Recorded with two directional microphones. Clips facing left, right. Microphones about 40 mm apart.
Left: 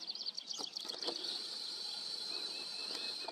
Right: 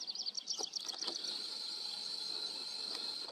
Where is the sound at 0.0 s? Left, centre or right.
Centre.